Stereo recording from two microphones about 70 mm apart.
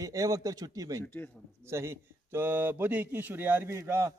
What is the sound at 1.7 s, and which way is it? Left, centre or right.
A man's voice, right.